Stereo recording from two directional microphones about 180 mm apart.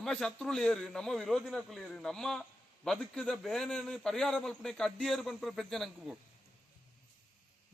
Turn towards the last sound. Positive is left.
turn(degrees=0)  # may be behind; listen again after turning